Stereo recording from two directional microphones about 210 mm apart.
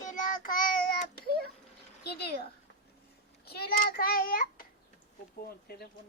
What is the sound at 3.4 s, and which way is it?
Child singing, 45° left (ahead or behind).